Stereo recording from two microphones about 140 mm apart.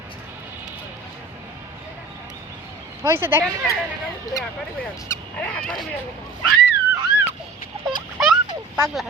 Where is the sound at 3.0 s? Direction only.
15° right (ahead or behind).